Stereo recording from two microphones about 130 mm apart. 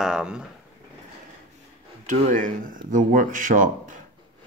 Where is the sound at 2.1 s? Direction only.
90° right.